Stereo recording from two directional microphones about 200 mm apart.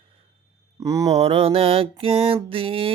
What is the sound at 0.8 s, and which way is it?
Speech, 20° right (ahead or behind).